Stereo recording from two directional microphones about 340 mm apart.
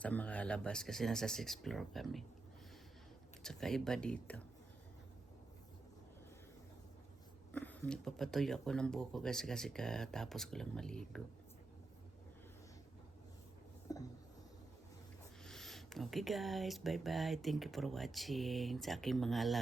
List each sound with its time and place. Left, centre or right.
0.0 s speech: centre
3.4 s speech: centre
7.5 s speech: centre
13.9 s a sound: centre
15.4 s speech: centre